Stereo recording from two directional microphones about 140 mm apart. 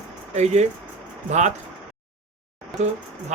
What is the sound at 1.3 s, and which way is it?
Speech, 55° right (ahead or behind).